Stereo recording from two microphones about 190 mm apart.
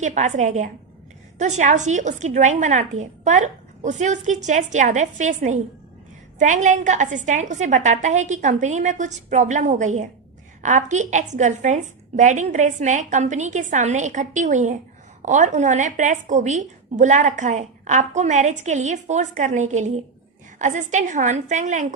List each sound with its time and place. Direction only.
0.0 s speech: 40° right (ahead or behind)